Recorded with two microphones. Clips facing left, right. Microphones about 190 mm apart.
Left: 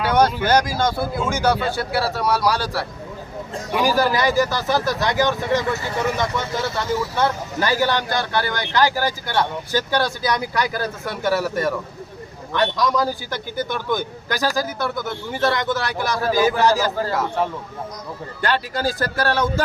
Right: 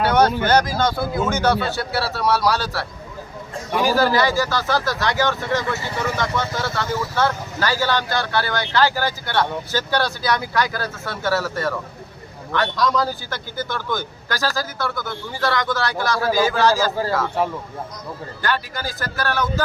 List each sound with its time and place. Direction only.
0.1 s speech: 10° left (ahead or behind)
3.9 s speech: 15° left (ahead or behind)
18.4 s speech: 30° left (ahead or behind)